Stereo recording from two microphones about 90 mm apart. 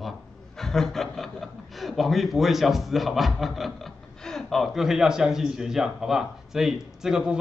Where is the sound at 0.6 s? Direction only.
5° left (ahead or behind).